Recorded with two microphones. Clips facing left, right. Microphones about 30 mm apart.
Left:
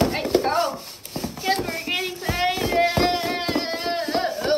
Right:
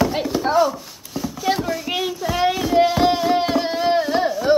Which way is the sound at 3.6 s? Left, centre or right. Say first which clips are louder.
Right 5 dB; left.